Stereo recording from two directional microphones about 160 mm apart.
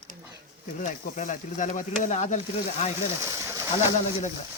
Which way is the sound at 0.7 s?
55° left (ahead or behind).